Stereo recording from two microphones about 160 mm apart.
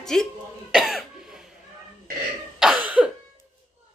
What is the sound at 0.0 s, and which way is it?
Speech, 5° left (ahead or behind).